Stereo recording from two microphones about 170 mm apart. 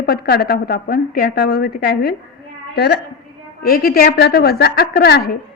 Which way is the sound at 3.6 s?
65° left (ahead or behind).